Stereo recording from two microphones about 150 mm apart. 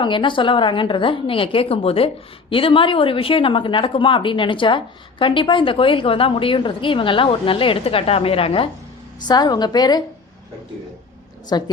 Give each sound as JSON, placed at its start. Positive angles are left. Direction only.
{"t": 0.0, "sound": "a woman's voice", "side_deg": 30}
{"t": 9.2, "sound": "a woman's voice", "side_deg": 25}
{"t": 11.5, "sound": "a woman's voice", "side_deg": 30}